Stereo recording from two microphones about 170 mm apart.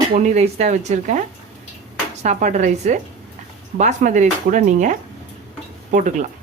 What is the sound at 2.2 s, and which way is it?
Speech, 45° right (ahead or behind).